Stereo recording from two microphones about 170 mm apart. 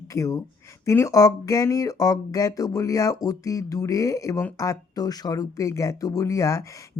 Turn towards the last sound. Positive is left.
turn(degrees=20)  # may be behind; listen again after turning